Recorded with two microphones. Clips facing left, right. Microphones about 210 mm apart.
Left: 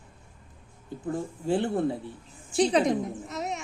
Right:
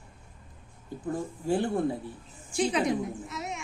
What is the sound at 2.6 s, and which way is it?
A woman's voice, 40° left (ahead or behind).